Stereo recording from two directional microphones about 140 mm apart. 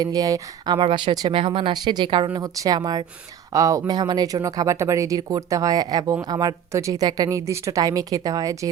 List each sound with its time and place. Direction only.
0.0 s speech: 25° right (ahead or behind)